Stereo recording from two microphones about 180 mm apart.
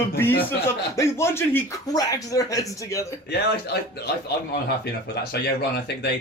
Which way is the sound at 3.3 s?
65° left (ahead or behind).